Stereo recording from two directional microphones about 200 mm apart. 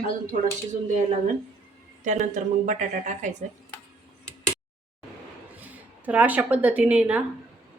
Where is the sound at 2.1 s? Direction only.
35° right (ahead or behind).